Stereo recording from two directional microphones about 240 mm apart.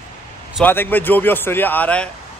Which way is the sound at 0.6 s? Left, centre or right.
Centre.